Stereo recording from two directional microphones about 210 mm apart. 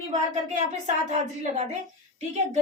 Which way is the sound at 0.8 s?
30° right (ahead or behind).